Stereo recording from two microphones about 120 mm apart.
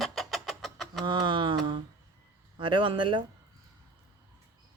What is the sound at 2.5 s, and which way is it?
Speech, 45° right (ahead or behind).